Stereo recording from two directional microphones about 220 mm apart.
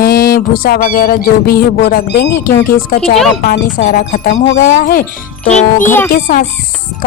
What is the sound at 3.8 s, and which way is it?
A woman's voice, 40° left (ahead or behind).